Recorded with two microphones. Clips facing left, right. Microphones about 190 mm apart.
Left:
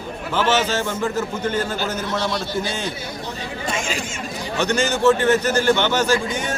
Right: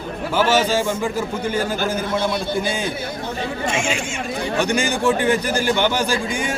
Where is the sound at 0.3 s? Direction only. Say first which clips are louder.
Right 2 dB; 10° right (ahead or behind).